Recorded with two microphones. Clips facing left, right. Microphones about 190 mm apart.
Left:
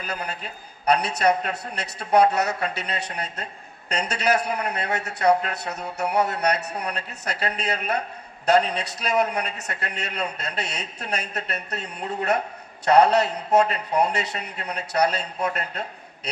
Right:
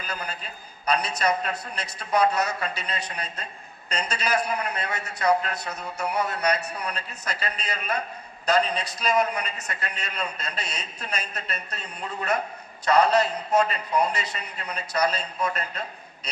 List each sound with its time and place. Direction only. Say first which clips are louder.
0.0 s a man's voice: left 3 dB; 65° left (ahead or behind)